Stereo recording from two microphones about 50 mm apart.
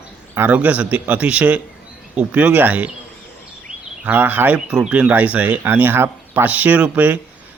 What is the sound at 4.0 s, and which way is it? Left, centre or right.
Speech, right.